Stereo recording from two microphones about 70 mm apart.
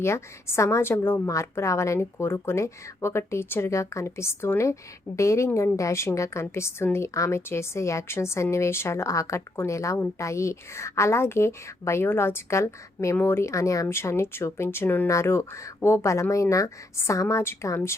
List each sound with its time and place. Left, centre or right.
0.0 s a woman's voice: left
1.3 s a woman's voice: left
13.8 s a woman's voice: left